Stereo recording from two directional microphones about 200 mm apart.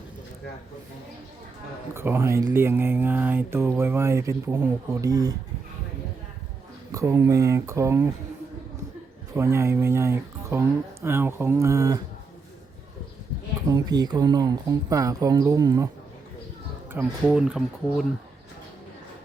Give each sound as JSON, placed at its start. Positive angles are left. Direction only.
{"t": 1.9, "sound": "speech", "side_deg": -10}
{"t": 6.9, "sound": "speech", "side_deg": -15}
{"t": 9.3, "sound": "speech", "side_deg": -15}
{"t": 13.7, "sound": "speech", "side_deg": -20}
{"t": 16.9, "sound": "speech", "side_deg": -10}